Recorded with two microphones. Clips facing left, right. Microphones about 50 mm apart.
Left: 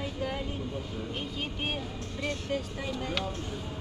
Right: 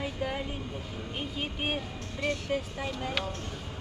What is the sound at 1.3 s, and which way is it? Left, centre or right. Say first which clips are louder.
Speech: right 4 dB; centre.